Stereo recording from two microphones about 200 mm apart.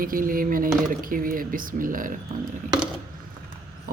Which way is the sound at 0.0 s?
45° right (ahead or behind).